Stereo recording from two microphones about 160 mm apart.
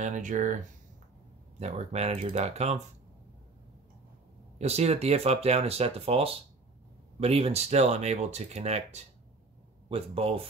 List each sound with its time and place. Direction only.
0.0 s speech: 55° right (ahead or behind)
1.6 s speech: 40° right (ahead or behind)
4.6 s speech: 40° right (ahead or behind)